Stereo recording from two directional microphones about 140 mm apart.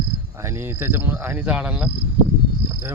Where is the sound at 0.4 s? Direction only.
20° right (ahead or behind).